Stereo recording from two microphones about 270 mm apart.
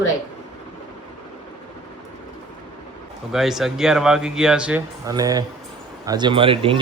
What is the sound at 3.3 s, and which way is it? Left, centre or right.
A man's voice, centre.